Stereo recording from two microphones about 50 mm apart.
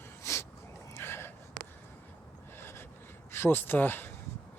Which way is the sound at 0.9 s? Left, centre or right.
Left.